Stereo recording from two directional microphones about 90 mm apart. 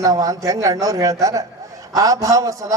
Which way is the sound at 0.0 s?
40° right (ahead or behind).